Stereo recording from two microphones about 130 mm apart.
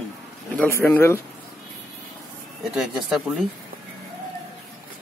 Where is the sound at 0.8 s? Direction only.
15° left (ahead or behind).